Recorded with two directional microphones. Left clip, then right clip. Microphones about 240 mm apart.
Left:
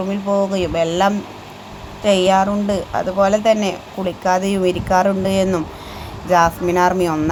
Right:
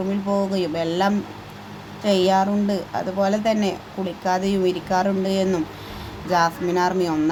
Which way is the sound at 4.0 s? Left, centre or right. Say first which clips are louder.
Left 7 dB; left.